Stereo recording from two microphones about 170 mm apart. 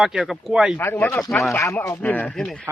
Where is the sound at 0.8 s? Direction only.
10° left (ahead or behind).